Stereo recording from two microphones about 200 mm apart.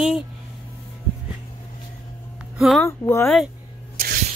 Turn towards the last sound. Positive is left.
turn(degrees=-45)  # may be behind; listen again after turning